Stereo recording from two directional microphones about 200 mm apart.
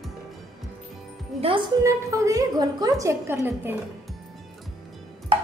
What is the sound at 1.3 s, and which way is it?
Music, 30° right (ahead or behind).